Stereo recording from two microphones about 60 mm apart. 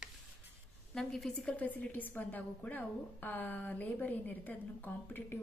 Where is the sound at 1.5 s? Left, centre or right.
Left.